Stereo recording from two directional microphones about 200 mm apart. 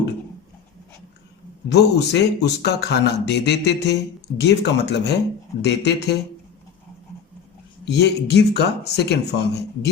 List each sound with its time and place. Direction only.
1.7 s speech: 55° left (ahead or behind)
7.9 s speech: 55° left (ahead or behind)